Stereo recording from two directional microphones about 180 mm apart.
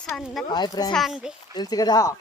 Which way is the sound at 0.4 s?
25° left (ahead or behind).